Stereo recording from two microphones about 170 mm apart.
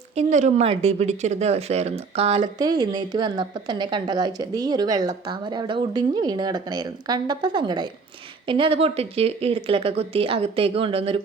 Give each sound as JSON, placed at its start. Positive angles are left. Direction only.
{"t": 0.2, "sound": "speech", "side_deg": -45}
{"t": 2.6, "sound": "a woman's voice", "side_deg": -25}